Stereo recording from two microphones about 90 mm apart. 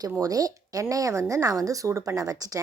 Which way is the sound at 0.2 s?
40° right (ahead or behind).